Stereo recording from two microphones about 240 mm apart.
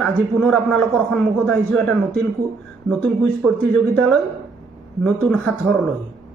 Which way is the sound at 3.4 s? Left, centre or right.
Centre.